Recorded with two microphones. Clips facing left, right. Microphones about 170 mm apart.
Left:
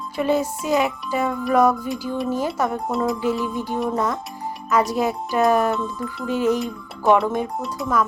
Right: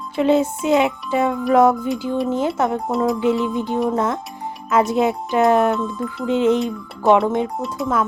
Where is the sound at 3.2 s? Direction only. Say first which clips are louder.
Right 4 dB; 25° right (ahead or behind).